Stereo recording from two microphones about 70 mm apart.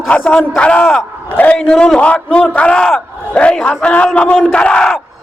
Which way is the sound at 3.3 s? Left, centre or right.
Centre.